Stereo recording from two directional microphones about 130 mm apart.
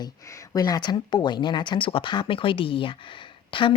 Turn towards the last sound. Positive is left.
turn(degrees=40)  # may be behind; listen again after turning